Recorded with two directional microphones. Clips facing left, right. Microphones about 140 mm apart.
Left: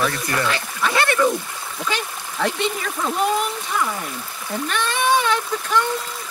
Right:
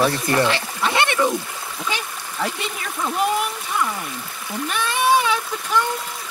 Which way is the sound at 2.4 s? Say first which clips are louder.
Left 5 dB; 5° right (ahead or behind).